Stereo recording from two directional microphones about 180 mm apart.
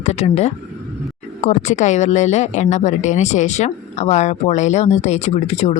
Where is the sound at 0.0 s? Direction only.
35° left (ahead or behind).